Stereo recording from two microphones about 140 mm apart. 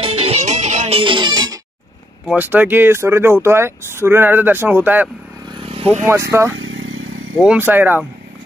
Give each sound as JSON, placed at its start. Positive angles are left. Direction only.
{"t": 0.0, "sound": "music", "side_deg": -45}
{"t": 2.3, "sound": "speech", "side_deg": -10}
{"t": 5.6, "sound": "vehicle", "side_deg": -45}
{"t": 6.0, "sound": "speech", "side_deg": -20}